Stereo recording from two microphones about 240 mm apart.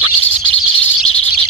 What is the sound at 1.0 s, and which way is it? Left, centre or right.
Bird, left.